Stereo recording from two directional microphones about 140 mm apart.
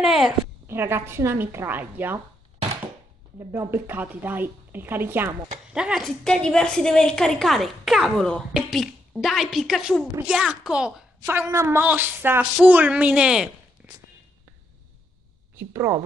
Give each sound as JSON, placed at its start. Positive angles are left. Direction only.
{"t": 0.0, "sound": "a woman's voice", "side_deg": -5}
{"t": 0.7, "sound": "a woman's voice", "side_deg": -15}
{"t": 3.3, "sound": "a woman's voice", "side_deg": -15}
{"t": 15.5, "sound": "a woman's voice", "side_deg": -20}